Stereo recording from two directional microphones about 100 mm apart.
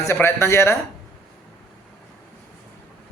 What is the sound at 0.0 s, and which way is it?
Speech, 25° left (ahead or behind).